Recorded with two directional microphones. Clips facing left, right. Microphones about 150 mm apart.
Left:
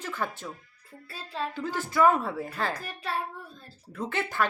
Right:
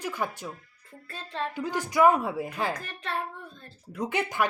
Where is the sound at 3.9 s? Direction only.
15° right (ahead or behind).